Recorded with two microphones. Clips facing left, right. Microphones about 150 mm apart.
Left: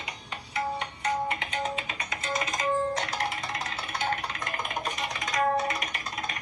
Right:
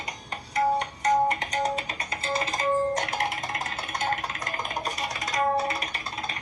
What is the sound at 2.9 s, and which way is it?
Music, 50° right (ahead or behind).